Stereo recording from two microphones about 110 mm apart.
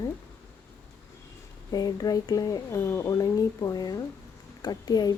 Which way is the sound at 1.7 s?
35° left (ahead or behind).